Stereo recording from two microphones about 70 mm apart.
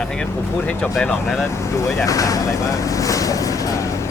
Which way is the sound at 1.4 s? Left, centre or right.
Left.